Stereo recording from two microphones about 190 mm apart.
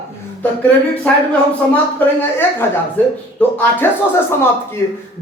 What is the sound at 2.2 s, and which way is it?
A man's voice, 10° left (ahead or behind).